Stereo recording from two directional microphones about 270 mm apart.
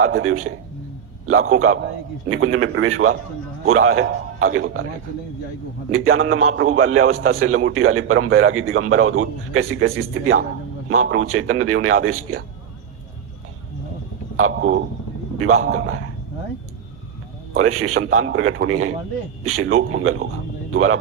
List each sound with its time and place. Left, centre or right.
0.0 s a man's voice: right
5.9 s a man's voice: right
15.4 s a man's voice: right
17.5 s a man's voice: right